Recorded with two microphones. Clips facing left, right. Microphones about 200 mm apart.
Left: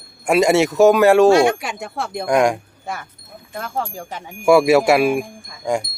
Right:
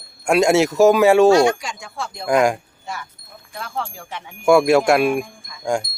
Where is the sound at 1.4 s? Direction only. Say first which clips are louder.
Left 1 dB; 60° left (ahead or behind).